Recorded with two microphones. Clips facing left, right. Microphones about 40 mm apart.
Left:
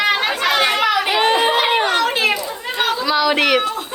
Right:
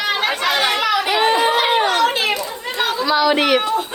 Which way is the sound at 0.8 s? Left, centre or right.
Left.